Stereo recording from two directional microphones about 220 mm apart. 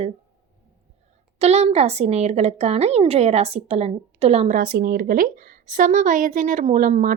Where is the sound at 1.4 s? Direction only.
30° right (ahead or behind).